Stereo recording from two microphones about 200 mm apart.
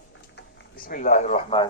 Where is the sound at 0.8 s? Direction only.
45° left (ahead or behind).